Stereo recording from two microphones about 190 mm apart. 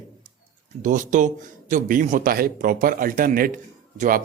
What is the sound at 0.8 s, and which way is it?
A man's voice, 45° right (ahead or behind).